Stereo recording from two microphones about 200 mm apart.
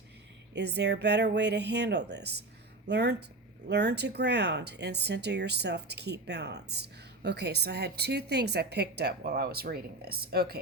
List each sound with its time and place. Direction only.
0.5 s speech: 55° right (ahead or behind)